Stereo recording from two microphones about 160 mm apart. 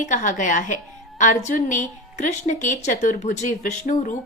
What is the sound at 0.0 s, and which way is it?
A woman's voice, 50° left (ahead or behind).